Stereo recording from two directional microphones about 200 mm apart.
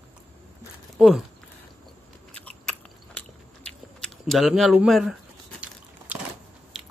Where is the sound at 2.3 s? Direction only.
5° left (ahead or behind).